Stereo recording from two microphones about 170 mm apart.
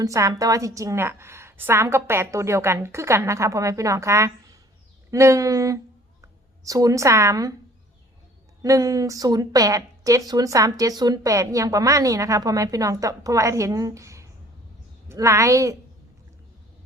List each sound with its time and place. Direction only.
0.0 s a woman's voice: 20° right (ahead or behind)
8.6 s a woman's voice: 20° right (ahead or behind)